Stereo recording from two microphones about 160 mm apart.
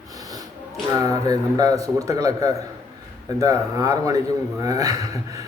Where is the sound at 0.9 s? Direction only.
20° right (ahead or behind).